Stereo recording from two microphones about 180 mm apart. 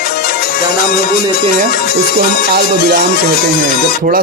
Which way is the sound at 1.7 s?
55° left (ahead or behind).